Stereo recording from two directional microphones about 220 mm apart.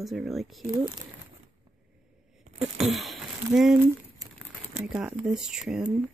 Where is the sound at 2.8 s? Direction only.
Centre (ahead or behind).